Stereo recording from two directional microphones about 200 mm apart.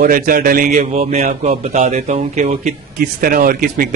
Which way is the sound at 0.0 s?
45° right (ahead or behind).